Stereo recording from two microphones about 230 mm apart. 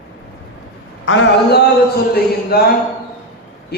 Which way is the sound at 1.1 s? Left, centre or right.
Left.